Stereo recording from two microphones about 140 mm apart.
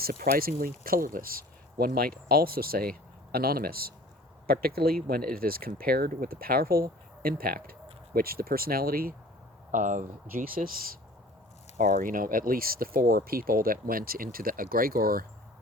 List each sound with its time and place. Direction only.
0.0 s speech: 90° right
9.7 s speech: 65° right (ahead or behind); by 15.3 s 90° right